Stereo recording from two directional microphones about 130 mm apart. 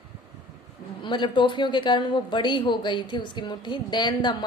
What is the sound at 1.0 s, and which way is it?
Speech, 35° left (ahead or behind).